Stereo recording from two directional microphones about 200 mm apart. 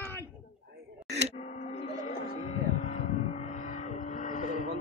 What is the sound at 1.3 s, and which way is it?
Vehicle, 35° left (ahead or behind).